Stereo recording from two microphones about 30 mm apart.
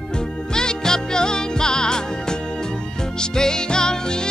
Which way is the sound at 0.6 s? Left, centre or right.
Left.